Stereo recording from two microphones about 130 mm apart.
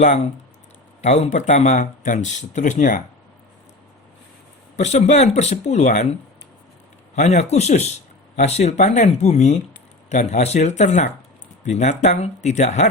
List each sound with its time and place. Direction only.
1.0 s speech: 55° left (ahead or behind); by 3.0 s 75° left (ahead or behind)
4.8 s speech: 60° left (ahead or behind)
7.2 s speech: 60° left (ahead or behind)